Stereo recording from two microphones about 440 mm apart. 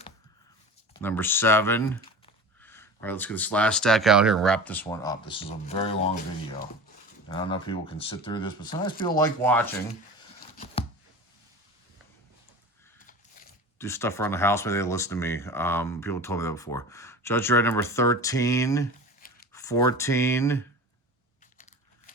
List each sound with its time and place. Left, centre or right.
0.9 s speech: centre
13.7 s speech: centre
19.2 s a sound: centre
19.5 s speech: centre